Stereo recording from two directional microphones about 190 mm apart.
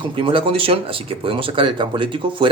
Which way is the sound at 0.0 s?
25° right (ahead or behind).